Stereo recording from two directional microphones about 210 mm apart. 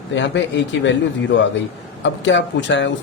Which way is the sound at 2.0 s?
60° left (ahead or behind).